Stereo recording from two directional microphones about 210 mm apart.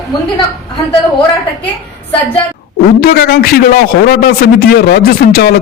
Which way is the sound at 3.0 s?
45° left (ahead or behind).